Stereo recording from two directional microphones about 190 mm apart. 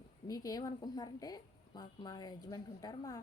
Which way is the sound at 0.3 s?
20° left (ahead or behind).